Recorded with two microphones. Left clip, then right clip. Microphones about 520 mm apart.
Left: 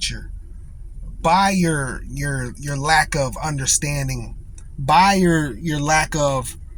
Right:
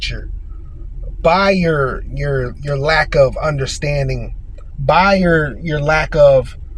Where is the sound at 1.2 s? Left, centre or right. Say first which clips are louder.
Right 4 dB; left.